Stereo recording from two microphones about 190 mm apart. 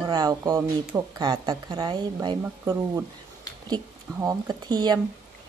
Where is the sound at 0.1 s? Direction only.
20° right (ahead or behind).